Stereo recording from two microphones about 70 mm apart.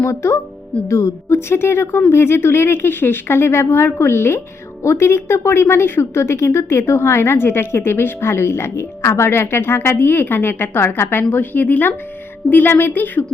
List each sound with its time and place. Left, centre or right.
0.0 s a woman's voice: left